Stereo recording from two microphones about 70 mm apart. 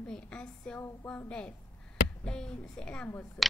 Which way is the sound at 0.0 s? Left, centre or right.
Centre.